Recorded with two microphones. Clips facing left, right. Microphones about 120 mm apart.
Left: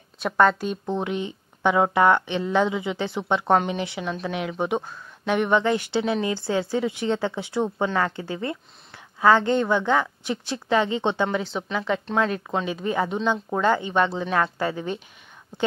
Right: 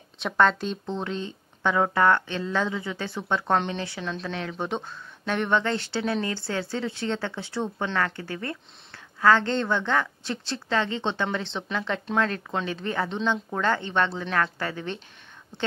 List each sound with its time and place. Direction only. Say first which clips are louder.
0.2 s speech: left 2 dB; 5° left (ahead or behind)